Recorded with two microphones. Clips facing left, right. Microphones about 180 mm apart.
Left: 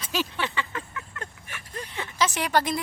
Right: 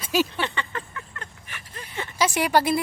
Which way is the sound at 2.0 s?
10° right (ahead or behind).